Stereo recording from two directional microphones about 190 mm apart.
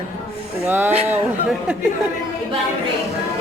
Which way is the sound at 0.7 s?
10° right (ahead or behind).